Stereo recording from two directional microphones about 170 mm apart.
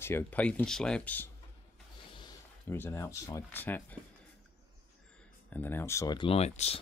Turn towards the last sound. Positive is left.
turn(degrees=40)  # may be behind; listen again after turning